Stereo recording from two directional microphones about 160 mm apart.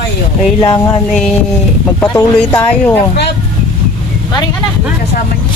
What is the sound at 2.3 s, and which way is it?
Speech, 10° left (ahead or behind).